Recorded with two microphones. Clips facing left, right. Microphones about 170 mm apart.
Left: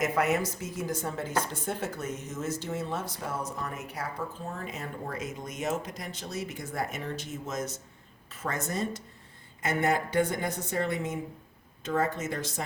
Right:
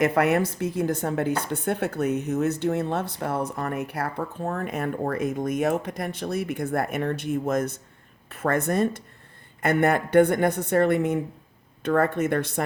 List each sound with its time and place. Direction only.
0.0 s speech: 60° right (ahead or behind)